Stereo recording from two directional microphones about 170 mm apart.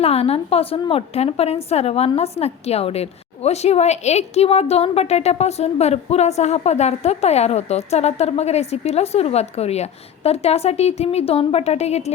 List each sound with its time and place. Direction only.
0.0 s a woman's voice: 35° left (ahead or behind)